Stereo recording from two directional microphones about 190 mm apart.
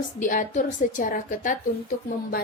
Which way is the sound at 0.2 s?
45° left (ahead or behind).